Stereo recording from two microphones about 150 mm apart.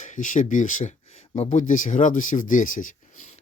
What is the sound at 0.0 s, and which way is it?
Speech, 55° left (ahead or behind).